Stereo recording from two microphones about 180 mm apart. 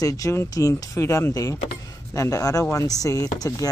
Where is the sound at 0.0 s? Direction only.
20° left (ahead or behind).